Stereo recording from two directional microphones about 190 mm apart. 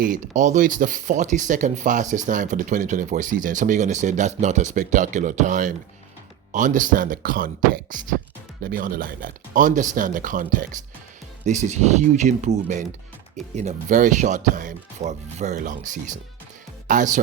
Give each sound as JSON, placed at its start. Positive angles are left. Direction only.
{"t": 0.0, "sound": "speech", "side_deg": -40}